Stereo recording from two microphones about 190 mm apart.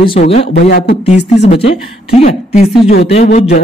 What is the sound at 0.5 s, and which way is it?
Speech, 55° left (ahead or behind).